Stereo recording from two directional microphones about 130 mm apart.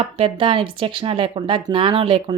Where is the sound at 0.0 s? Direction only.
45° right (ahead or behind).